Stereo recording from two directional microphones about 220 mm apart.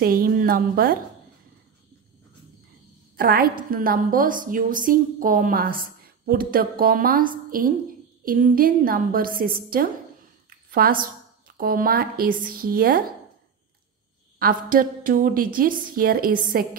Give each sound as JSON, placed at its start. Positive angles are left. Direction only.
{"t": 0.0, "sound": "a woman's voice", "side_deg": -40}
{"t": 3.2, "sound": "a woman's voice", "side_deg": -40}
{"t": 14.4, "sound": "a woman's voice", "side_deg": -40}